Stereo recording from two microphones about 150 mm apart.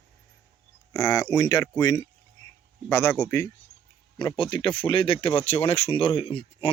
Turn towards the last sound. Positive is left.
turn(degrees=40)  # may be behind; listen again after turning